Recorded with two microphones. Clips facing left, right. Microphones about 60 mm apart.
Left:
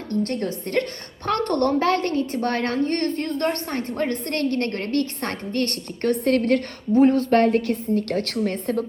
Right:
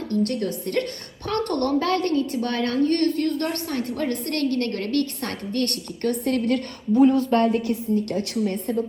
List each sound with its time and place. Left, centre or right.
0.1 s a sound: left
0.4 s a woman's voice: left
6.1 s a woman's voice: left